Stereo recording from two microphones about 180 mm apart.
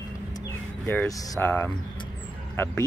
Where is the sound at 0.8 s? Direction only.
15° left (ahead or behind).